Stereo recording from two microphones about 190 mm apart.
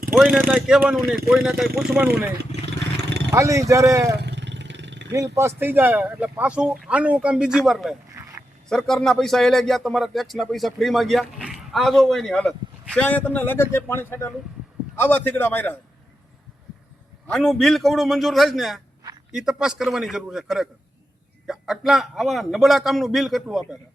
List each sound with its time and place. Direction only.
0.1 s speech: 5° left (ahead or behind)
0.3 s speech: 10° right (ahead or behind)
2.4 s vehicle: 65° right (ahead or behind)
3.3 s speech: 15° right (ahead or behind)
4.2 s vehicle: 65° right (ahead or behind)
5.1 s speech: 15° right (ahead or behind); by 7.9 s centre (ahead or behind)
8.1 s dog: 15° right (ahead or behind)
8.7 s a man's voice: centre (ahead or behind)
17.2 s speech: 5° left (ahead or behind)